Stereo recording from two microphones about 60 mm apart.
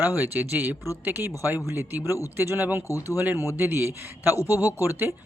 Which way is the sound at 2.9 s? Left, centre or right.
Left.